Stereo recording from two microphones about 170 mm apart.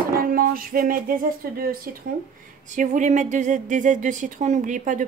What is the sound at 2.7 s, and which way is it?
Speech, 45° right (ahead or behind).